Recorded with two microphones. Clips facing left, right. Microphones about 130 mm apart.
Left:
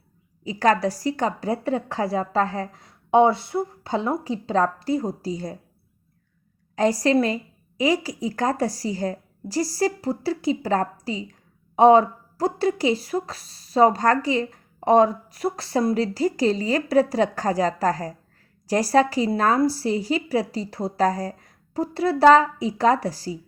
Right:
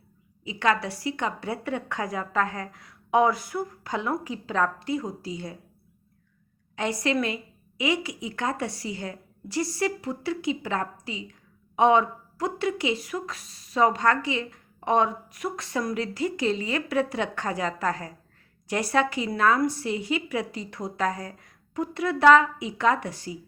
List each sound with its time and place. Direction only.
0.4 s a woman's voice: 40° left (ahead or behind)
6.7 s a woman's voice: 35° left (ahead or behind)